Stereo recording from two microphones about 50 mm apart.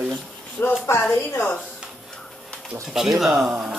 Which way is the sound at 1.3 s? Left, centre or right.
Left.